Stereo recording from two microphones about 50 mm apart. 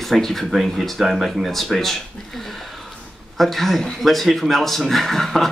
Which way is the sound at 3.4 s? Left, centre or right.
Centre.